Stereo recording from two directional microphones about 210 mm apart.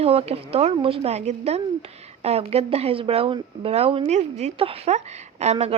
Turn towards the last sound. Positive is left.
turn(degrees=-30)  # may be behind; listen again after turning